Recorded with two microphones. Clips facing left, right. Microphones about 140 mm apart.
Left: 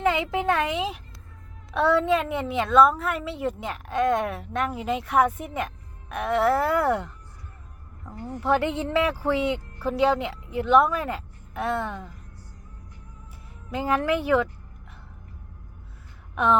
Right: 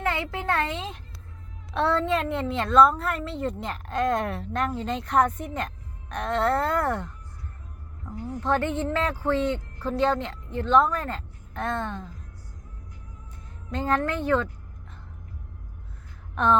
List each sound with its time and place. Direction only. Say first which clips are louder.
0.0 s a woman's voice: left 5 dB; 15° left (ahead or behind)
8.4 s speech: left 2 dB; 10° left (ahead or behind)
13.7 s speech: left 2 dB; 5° left (ahead or behind)
16.3 s a sound: even; 10° left (ahead or behind)